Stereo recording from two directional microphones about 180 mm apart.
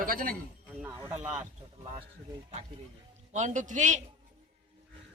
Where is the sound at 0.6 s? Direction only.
10° right (ahead or behind).